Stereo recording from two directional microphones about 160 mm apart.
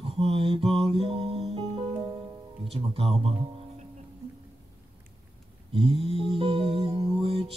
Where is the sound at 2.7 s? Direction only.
35° right (ahead or behind).